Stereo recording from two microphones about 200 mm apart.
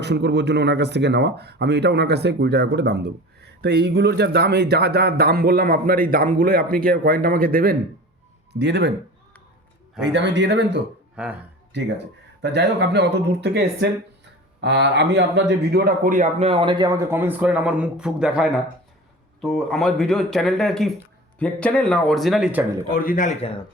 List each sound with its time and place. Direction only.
0.0 s speech: 60° right (ahead or behind)
8.5 s speech: 60° right (ahead or behind)
10.0 s speech: 60° right (ahead or behind)
11.2 s speech: 5° right (ahead or behind)
12.4 s speech: 60° right (ahead or behind); by 22.6 s 5° right (ahead or behind)
22.9 s a man's voice: 45° left (ahead or behind)